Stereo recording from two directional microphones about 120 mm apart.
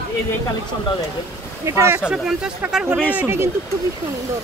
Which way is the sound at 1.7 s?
25° right (ahead or behind).